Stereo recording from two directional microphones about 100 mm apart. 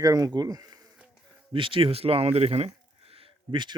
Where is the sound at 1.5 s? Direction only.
60° right (ahead or behind).